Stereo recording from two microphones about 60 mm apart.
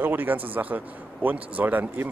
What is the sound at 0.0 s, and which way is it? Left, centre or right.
Speech, right.